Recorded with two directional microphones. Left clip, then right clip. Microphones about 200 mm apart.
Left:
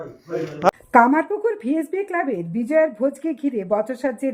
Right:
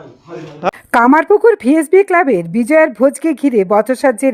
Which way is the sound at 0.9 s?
35° right (ahead or behind).